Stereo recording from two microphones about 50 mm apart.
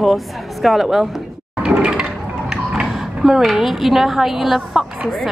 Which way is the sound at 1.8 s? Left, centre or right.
Centre.